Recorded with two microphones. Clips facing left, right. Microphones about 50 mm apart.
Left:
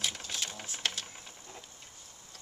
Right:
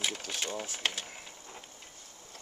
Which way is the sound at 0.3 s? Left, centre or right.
Centre.